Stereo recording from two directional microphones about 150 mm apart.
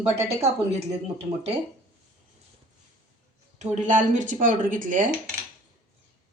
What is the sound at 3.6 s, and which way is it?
Speech, 55° right (ahead or behind).